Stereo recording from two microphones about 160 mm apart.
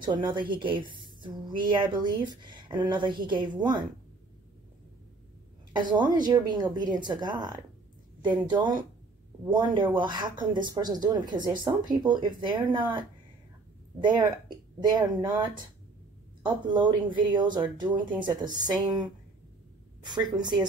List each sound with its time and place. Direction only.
0.0 s speech: 30° right (ahead or behind)
5.7 s speech: 30° right (ahead or behind)
20.1 s speech: 25° right (ahead or behind)